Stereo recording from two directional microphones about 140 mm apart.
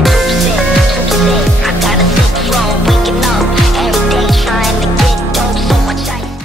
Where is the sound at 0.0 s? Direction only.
Centre (ahead or behind).